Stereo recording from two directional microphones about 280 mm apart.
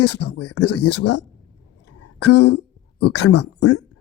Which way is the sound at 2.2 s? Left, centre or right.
Left.